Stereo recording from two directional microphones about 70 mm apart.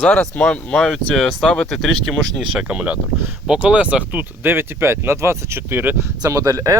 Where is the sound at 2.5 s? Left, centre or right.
Centre.